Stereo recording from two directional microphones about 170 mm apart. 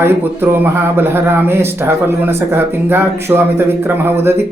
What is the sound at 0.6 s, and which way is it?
Speech, 10° right (ahead or behind).